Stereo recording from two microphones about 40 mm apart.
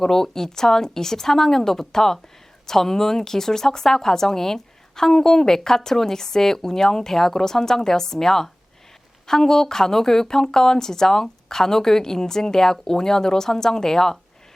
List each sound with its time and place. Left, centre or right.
0.0 s a woman's voice: centre